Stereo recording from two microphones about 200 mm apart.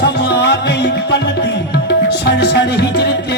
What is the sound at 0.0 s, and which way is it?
Music, 60° left (ahead or behind).